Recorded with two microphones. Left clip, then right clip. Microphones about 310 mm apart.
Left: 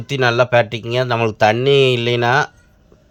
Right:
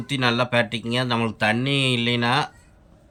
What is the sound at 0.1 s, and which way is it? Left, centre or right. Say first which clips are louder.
Speech: left 7 dB; centre.